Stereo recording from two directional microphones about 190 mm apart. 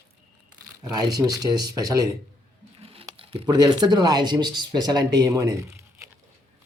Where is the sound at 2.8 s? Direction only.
30° right (ahead or behind).